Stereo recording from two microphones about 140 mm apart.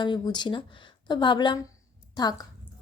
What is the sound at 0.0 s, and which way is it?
A woman's voice, 35° left (ahead or behind).